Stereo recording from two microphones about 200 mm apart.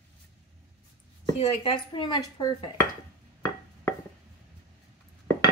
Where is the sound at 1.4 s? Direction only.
30° left (ahead or behind).